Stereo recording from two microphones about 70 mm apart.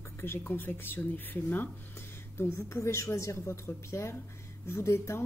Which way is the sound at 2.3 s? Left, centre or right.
Left.